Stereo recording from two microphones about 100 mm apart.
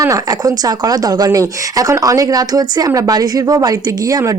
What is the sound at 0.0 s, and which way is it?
A woman's voice, 35° right (ahead or behind).